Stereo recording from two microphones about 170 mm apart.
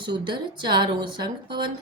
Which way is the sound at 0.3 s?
25° right (ahead or behind).